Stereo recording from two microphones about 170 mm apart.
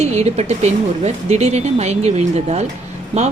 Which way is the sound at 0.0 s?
40° right (ahead or behind).